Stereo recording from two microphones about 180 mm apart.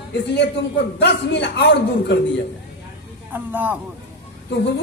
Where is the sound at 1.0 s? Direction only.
75° left (ahead or behind).